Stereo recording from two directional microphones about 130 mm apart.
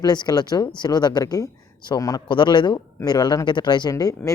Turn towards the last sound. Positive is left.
turn(degrees=25)  # may be behind; listen again after turning